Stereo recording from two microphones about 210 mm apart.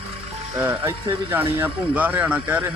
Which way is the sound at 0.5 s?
10° right (ahead or behind).